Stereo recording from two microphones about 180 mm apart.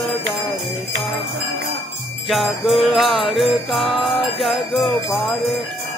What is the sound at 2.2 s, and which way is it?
Jingle bell, centre (ahead or behind).